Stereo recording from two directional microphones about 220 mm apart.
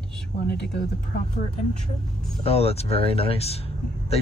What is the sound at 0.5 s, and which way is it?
Speech, 50° left (ahead or behind).